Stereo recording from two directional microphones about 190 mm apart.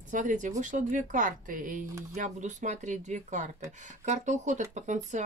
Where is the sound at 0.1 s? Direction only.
40° right (ahead or behind).